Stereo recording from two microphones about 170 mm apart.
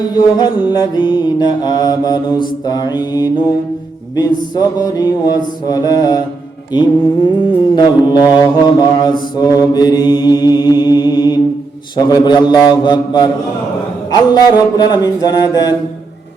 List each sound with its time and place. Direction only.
0.1 s music: 25° left (ahead or behind)